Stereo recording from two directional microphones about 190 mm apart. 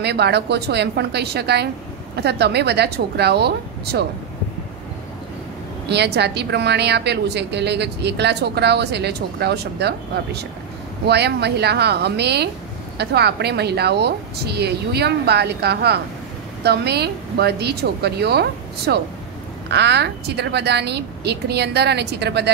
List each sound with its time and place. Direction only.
0.0 s a woman's voice: 60° right (ahead or behind)
5.9 s a woman's voice: 60° right (ahead or behind)